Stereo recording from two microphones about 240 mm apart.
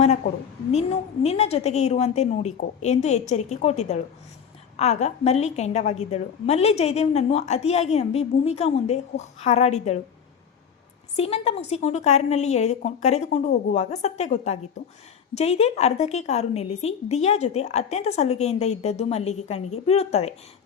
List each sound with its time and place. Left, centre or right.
0.7 s a woman's voice: left
11.2 s a woman's voice: left